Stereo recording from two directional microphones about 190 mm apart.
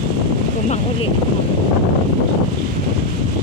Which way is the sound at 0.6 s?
35° left (ahead or behind).